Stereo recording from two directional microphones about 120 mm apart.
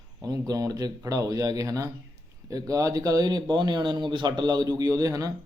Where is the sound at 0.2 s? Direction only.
30° right (ahead or behind).